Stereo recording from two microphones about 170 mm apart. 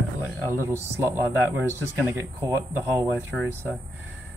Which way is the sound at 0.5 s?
15° right (ahead or behind).